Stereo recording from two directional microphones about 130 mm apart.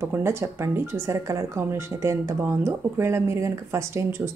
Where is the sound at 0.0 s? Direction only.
20° right (ahead or behind).